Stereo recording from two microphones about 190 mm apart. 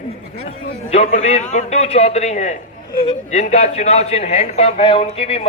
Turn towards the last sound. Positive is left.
turn(degrees=30)  # may be behind; listen again after turning